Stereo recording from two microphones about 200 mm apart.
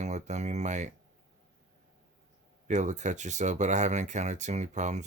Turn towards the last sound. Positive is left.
turn(degrees=-35)  # may be behind; listen again after turning